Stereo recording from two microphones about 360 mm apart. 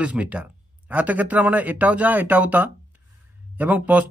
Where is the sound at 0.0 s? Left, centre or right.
Centre.